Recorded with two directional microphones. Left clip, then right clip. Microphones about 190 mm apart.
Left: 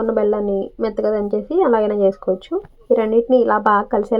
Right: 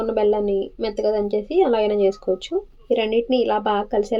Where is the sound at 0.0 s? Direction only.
5° left (ahead or behind).